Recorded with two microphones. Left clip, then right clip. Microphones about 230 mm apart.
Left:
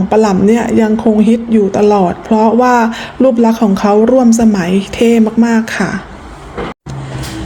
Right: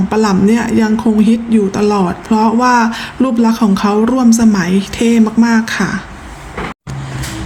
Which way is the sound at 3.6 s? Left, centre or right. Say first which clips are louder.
Left 2 dB; right.